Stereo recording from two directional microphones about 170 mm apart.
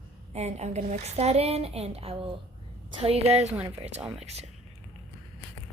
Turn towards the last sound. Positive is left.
turn(degrees=-40)  # may be behind; listen again after turning